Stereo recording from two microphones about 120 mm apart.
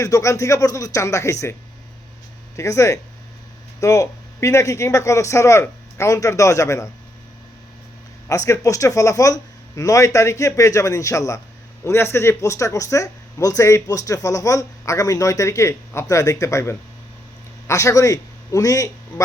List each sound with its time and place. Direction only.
0.0 s speech: 25° left (ahead or behind)
2.6 s speech: 25° left (ahead or behind)
8.3 s a man's voice: 25° left (ahead or behind)